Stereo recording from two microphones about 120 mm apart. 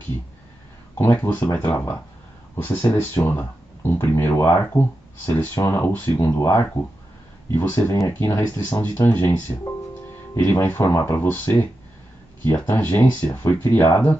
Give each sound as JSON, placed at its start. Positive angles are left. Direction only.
{"t": 0.9, "sound": "speech", "side_deg": 20}
{"t": 10.3, "sound": "speech", "side_deg": 20}